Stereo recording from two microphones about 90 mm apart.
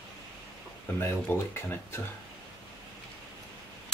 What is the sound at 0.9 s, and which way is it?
Speech, 25° left (ahead or behind).